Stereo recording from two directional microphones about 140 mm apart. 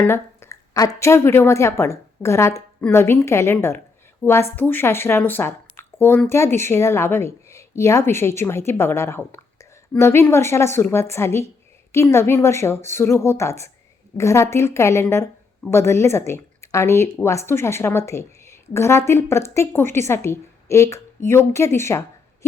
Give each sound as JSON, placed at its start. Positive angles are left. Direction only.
{"t": 0.0, "sound": "a woman's voice", "side_deg": 20}